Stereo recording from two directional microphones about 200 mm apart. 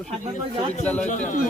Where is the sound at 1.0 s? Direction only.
40° left (ahead or behind).